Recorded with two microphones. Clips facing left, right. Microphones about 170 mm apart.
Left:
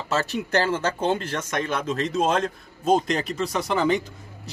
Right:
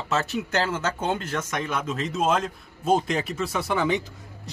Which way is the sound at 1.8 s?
5° right (ahead or behind).